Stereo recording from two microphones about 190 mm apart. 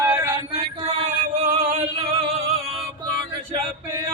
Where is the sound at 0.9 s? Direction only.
35° right (ahead or behind).